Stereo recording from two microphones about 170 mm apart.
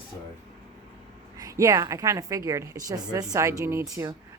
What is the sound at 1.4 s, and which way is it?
A woman's voice, 20° right (ahead or behind).